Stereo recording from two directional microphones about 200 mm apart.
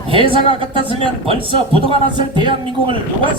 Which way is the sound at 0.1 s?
25° right (ahead or behind).